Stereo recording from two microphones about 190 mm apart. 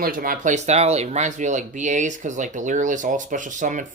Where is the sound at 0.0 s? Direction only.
50° right (ahead or behind).